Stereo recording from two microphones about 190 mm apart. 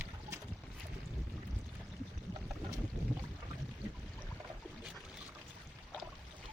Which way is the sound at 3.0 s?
15° right (ahead or behind).